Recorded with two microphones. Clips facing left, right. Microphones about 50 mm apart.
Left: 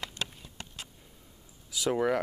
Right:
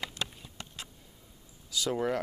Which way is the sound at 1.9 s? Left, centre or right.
Left.